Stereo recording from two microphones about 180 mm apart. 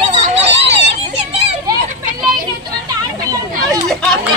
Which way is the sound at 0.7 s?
80° right.